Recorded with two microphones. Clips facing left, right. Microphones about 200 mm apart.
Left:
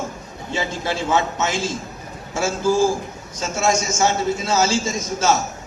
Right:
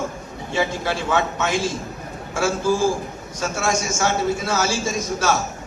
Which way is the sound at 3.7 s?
60° right (ahead or behind).